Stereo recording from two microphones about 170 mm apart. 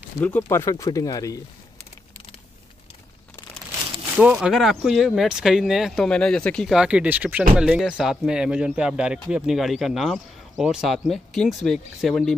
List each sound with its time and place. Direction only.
0.2 s speech: 15° left (ahead or behind)
4.2 s speech: 5° right (ahead or behind)